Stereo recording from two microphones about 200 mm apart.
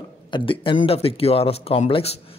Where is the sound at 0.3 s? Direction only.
25° left (ahead or behind).